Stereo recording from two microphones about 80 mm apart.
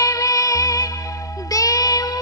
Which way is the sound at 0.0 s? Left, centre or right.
Left.